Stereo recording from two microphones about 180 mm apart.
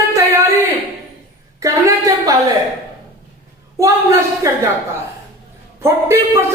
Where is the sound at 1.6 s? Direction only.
20° right (ahead or behind).